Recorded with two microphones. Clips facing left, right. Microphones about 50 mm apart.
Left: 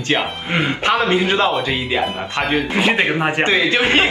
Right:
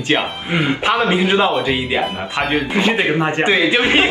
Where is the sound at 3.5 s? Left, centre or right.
Centre.